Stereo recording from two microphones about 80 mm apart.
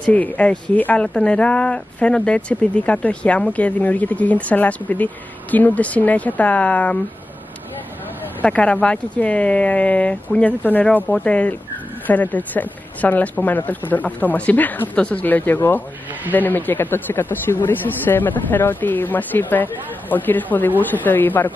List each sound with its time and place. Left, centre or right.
0.0 s speech: centre
8.4 s speech: centre